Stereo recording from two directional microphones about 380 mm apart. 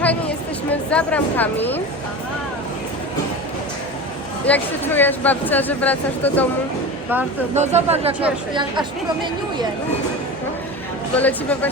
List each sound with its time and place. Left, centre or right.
0.0 s speech: centre
4.4 s speech: centre
7.5 s speech: centre
11.2 s speech: centre